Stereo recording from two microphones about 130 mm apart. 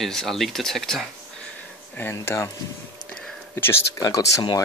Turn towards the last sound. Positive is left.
turn(degrees=30)  # may be behind; listen again after turning